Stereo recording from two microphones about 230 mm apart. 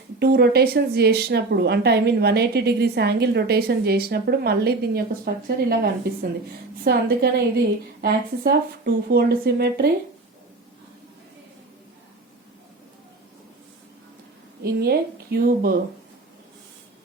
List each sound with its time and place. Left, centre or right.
0.2 s a woman's voice: right
14.6 s speech: right